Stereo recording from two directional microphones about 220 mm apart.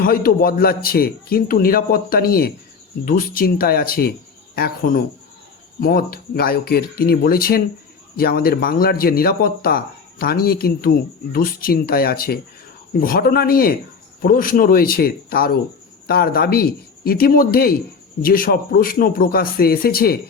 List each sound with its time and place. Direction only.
0.0 s speech: 40° left (ahead or behind)